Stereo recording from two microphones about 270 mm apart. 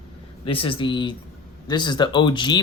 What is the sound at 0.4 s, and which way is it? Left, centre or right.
Speech, centre.